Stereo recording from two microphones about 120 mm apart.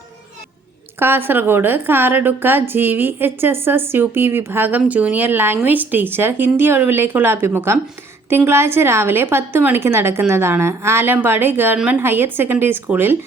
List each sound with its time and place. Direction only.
0.9 s a woman's voice: 20° right (ahead or behind)